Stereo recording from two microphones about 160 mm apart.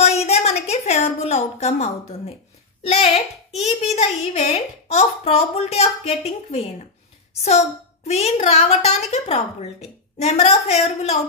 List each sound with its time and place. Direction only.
0.0 s a sound: 40° left (ahead or behind)
2.8 s a woman's voice: 40° left (ahead or behind)
8.1 s a woman's voice: 40° left (ahead or behind)